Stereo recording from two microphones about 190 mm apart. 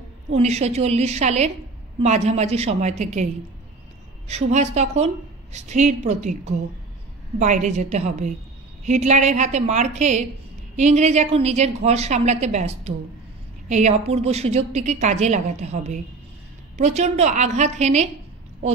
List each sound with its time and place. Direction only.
0.3 s a woman's voice: 35° right (ahead or behind)
4.3 s a woman's voice: 35° right (ahead or behind)